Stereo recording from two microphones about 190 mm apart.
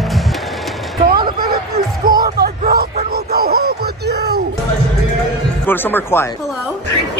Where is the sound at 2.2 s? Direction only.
55° right (ahead or behind).